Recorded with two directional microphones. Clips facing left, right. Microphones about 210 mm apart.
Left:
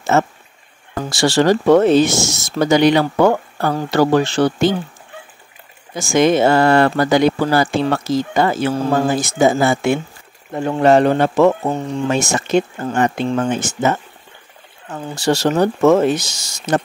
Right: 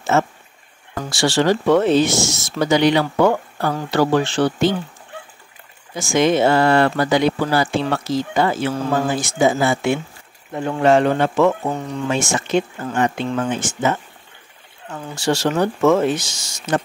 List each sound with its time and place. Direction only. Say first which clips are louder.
0.1 s speech: left 2 dB; 45° left (ahead or behind)
5.9 s speech: left 3 dB; 45° left (ahead or behind); by 12.1 s 25° left (ahead or behind)
12.1 s speech: left 2 dB; 40° left (ahead or behind)
15.1 s speech: left 3 dB; 40° left (ahead or behind)